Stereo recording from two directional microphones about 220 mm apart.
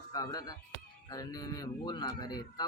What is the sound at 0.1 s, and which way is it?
Speech, 15° left (ahead or behind).